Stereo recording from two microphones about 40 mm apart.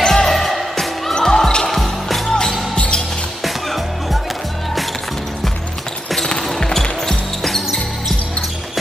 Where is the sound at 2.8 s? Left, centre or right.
Left.